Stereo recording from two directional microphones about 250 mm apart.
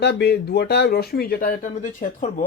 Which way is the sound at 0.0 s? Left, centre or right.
Left.